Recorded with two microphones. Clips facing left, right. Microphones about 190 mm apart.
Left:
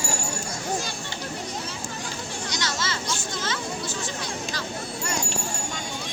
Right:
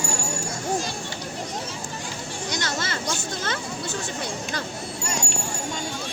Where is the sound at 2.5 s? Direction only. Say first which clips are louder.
Right 2 dB; 55° right (ahead or behind).